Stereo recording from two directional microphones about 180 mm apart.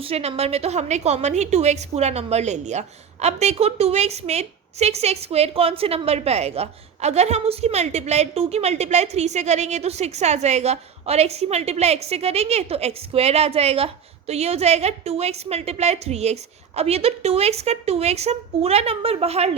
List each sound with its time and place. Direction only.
0.0 s a woman's voice: 35° right (ahead or behind)